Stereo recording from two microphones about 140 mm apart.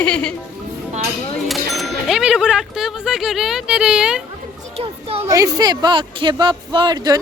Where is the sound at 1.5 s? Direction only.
Centre (ahead or behind).